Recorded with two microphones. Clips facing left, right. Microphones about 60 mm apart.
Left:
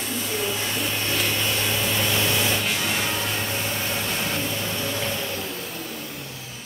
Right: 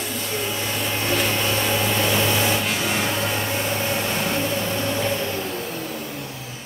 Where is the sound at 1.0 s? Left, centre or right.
Centre.